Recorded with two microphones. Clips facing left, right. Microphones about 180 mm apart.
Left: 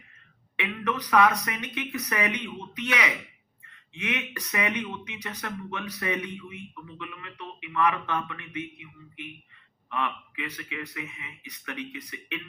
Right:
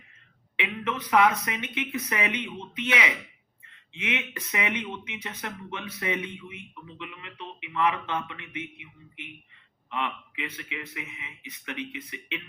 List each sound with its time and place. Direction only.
0.5 s speech: 20° right (ahead or behind)